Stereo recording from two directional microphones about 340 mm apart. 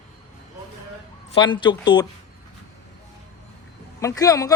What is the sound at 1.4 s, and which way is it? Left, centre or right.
Speech, centre.